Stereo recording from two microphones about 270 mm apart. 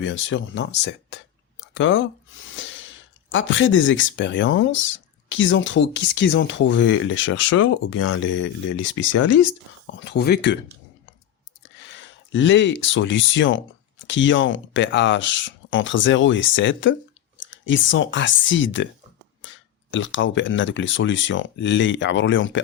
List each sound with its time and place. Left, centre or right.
0.0 s speech: left
2.6 s a sound: left
3.3 s speech: left
11.9 s speech: left